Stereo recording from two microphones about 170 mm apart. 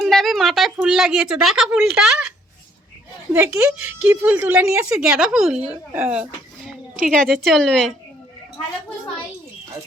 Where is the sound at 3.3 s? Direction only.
5° right (ahead or behind).